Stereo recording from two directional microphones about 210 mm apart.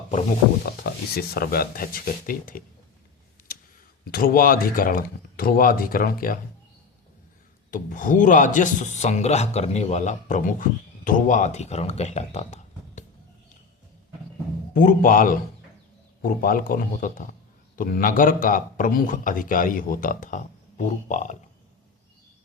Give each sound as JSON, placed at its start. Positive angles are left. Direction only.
{"t": 0.1, "sound": "speech", "side_deg": 35}
{"t": 1.1, "sound": "speech", "side_deg": 45}
{"t": 4.1, "sound": "speech", "side_deg": 45}
{"t": 7.7, "sound": "speech", "side_deg": 40}
{"t": 14.7, "sound": "speech", "side_deg": 40}